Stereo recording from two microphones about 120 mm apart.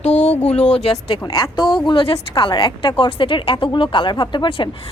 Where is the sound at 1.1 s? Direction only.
45° left (ahead or behind).